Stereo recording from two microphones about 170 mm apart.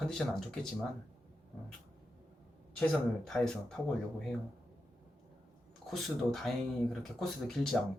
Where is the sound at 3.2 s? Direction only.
Centre (ahead or behind).